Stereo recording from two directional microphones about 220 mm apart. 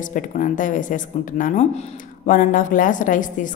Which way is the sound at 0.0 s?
35° left (ahead or behind).